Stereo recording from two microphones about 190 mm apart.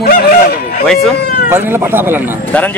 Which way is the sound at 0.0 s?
55° left (ahead or behind).